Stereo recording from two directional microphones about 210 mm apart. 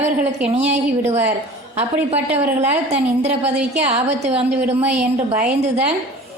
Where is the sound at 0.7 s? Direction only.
30° right (ahead or behind).